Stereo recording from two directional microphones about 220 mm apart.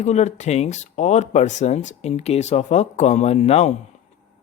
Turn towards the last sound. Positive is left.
turn(degrees=30)  # may be behind; listen again after turning